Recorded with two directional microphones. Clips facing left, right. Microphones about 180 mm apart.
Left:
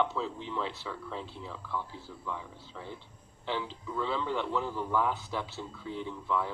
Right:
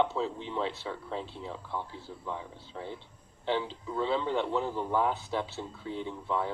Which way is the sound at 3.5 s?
25° right (ahead or behind).